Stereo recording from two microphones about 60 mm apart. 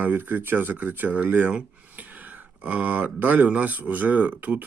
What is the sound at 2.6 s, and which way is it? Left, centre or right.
Speech, right.